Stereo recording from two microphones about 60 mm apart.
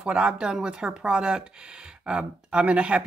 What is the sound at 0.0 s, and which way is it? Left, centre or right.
Speech, centre.